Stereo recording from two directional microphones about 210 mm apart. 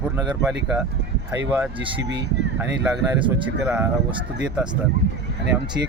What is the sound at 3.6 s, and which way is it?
Speech, 5° right (ahead or behind).